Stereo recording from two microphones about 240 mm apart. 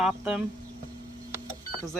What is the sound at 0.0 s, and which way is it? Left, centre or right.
Speech, centre.